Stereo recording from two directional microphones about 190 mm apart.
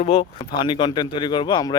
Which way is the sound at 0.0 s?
35° left (ahead or behind).